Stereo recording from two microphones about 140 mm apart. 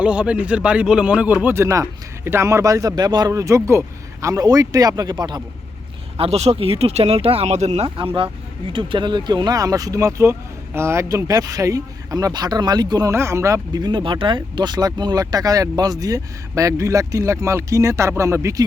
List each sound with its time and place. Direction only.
0.0 s speech: 10° right (ahead or behind); by 5.4 s 30° right (ahead or behind)
6.1 s speech: 45° right (ahead or behind)
7.9 s speech: 40° right (ahead or behind); by 18.6 s 20° right (ahead or behind)